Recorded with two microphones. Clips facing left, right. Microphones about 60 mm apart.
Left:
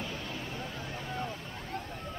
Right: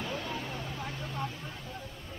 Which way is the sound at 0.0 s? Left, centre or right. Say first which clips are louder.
Right 3 dB; right.